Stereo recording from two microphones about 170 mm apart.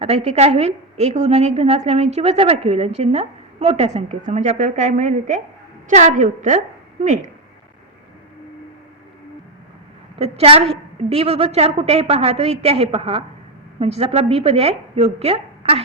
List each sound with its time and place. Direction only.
0.0 s a woman's voice: 40° right (ahead or behind)
10.2 s a woman's voice: 40° right (ahead or behind)